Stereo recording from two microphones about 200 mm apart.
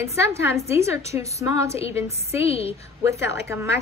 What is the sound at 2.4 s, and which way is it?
Speech, 30° left (ahead or behind).